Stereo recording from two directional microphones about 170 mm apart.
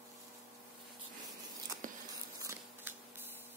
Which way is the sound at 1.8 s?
50° right (ahead or behind).